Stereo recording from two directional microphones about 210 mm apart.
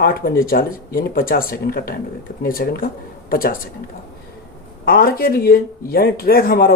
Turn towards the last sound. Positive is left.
turn(degrees=45)  # may be behind; listen again after turning